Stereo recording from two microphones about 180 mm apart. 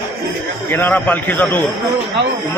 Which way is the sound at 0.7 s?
10° left (ahead or behind).